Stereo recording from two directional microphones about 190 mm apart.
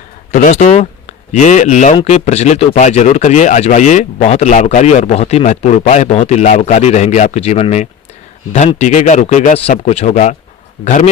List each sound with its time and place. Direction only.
0.3 s speech: 40° left (ahead or behind)